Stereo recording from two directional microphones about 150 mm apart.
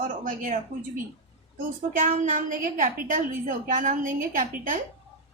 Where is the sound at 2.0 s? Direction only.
60° right (ahead or behind).